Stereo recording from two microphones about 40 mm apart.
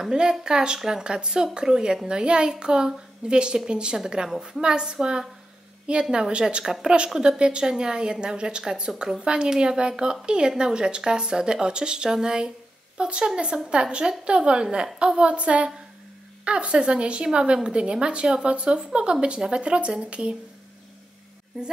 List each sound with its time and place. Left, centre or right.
0.1 s speech: right
6.0 s speech: centre
6.6 s a woman's voice: centre
7.2 s speech: right